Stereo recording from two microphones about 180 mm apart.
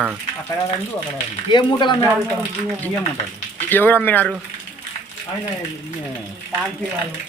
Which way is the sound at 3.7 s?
10° left (ahead or behind).